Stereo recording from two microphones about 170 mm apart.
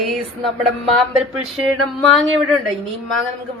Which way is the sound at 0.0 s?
Centre (ahead or behind).